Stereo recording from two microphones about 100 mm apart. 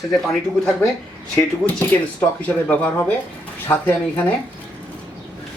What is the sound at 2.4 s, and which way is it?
Speech, 15° left (ahead or behind).